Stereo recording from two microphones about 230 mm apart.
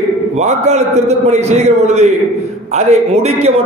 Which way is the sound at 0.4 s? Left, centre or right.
Right.